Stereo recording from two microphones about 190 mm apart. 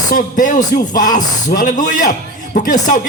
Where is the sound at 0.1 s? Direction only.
45° left (ahead or behind).